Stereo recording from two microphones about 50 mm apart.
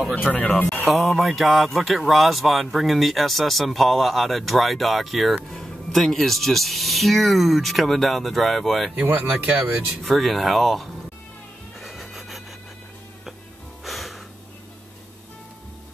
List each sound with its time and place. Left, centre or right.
0.3 s speech: centre
0.8 s a man's voice: centre
9.0 s speech: right
10.0 s a man's voice: centre
11.8 s neigh: centre
13.8 s music: centre